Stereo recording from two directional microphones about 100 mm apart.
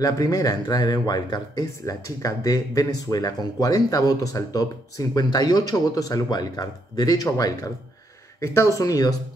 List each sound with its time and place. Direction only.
0.0 s speech: 40° left (ahead or behind)